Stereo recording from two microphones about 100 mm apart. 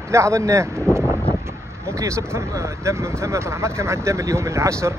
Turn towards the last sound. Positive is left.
turn(degrees=-30)  # may be behind; listen again after turning